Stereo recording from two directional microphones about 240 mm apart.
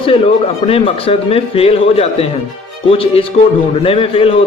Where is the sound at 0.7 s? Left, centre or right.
Left.